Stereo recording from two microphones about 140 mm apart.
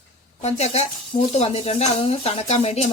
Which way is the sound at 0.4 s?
50° left (ahead or behind).